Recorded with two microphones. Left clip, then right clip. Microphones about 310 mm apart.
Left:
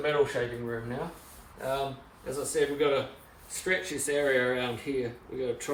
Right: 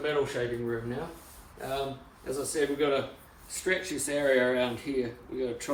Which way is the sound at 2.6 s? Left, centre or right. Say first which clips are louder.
Left 1 dB; centre.